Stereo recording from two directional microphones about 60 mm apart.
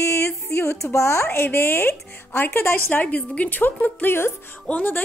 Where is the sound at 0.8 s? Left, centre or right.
Left.